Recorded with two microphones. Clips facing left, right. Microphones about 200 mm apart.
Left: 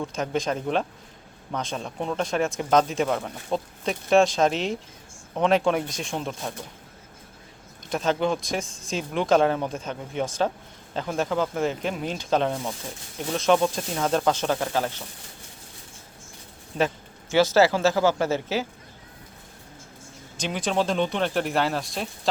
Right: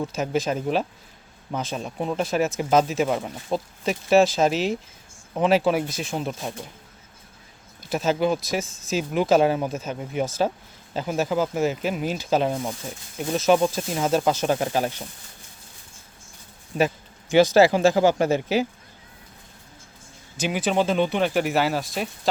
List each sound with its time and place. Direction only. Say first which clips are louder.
0.0 s speech: right 2 dB; 5° right (ahead or behind)
7.8 s speech: right 2 dB; 5° right (ahead or behind)
16.7 s speech: right 2 dB; 10° right (ahead or behind)
20.3 s speech: right 3 dB; 5° right (ahead or behind)